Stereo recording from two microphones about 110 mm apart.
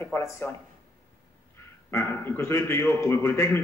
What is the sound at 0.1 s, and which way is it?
Speech, 20° left (ahead or behind).